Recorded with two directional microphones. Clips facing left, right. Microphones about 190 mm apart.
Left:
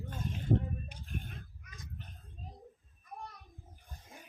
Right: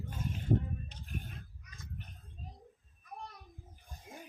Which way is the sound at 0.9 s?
10° left (ahead or behind).